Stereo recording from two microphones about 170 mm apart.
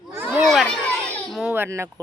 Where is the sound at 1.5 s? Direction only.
15° right (ahead or behind).